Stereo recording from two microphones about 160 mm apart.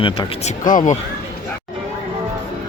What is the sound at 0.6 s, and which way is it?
Speech, 55° left (ahead or behind).